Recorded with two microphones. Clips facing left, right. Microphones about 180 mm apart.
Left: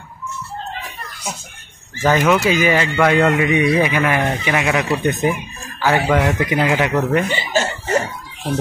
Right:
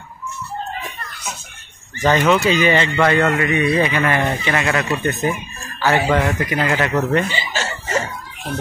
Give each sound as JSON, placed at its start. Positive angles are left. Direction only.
{"t": 2.0, "sound": "speech", "side_deg": 10}
{"t": 7.2, "sound": "chicken", "side_deg": 55}